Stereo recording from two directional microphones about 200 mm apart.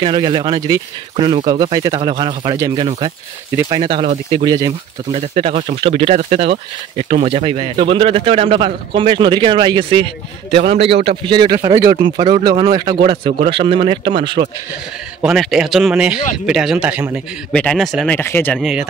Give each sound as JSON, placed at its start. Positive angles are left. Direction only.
{"t": 0.0, "sound": "a man's voice", "side_deg": -25}
{"t": 4.5, "sound": "a man's voice", "side_deg": -20}
{"t": 15.2, "sound": "speech", "side_deg": 0}